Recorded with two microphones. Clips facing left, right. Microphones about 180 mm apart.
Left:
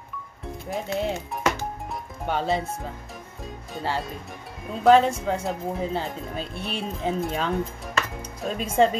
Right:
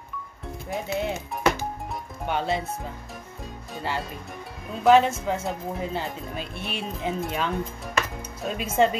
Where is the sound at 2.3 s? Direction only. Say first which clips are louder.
Left 1 dB; 35° left (ahead or behind).